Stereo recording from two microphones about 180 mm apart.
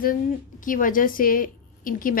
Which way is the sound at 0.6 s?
50° left (ahead or behind).